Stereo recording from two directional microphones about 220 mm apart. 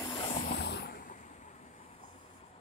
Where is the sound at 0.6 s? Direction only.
50° left (ahead or behind).